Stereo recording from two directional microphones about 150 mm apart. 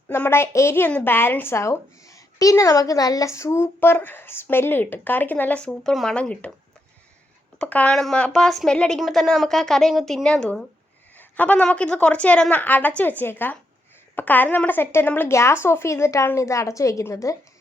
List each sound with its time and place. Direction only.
0.1 s a woman's voice: 15° left (ahead or behind)
7.6 s a woman's voice: 10° left (ahead or behind)